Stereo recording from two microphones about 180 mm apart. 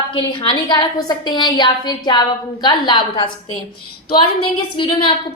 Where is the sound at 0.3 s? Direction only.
25° left (ahead or behind).